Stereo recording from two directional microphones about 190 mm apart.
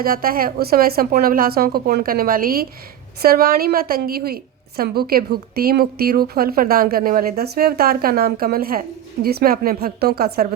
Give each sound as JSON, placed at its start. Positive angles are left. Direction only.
{"t": 0.0, "sound": "a woman's voice", "side_deg": -50}